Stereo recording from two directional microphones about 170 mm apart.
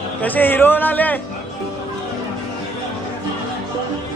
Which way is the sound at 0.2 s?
10° left (ahead or behind).